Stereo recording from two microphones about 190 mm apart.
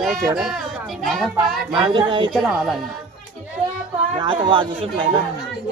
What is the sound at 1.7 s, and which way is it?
Speech, 25° right (ahead or behind).